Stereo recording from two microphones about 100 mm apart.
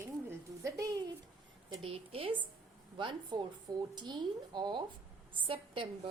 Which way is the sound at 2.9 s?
55° right (ahead or behind).